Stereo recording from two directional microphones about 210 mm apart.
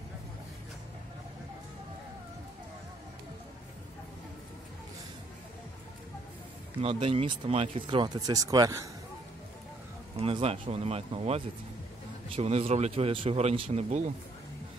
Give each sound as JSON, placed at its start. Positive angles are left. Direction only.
{"t": 6.8, "sound": "speech", "side_deg": -25}
{"t": 10.1, "sound": "speech", "side_deg": -25}